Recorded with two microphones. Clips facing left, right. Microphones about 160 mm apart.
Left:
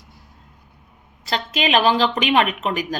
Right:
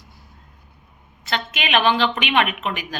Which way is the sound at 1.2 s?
35° left (ahead or behind).